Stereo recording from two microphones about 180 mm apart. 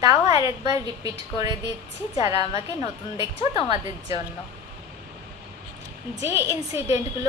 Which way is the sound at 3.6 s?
20° right (ahead or behind).